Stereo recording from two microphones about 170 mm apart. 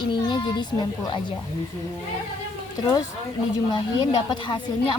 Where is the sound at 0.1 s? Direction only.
25° left (ahead or behind).